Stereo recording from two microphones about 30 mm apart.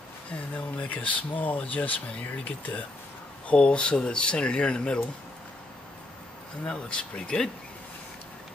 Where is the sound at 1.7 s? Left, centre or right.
Left.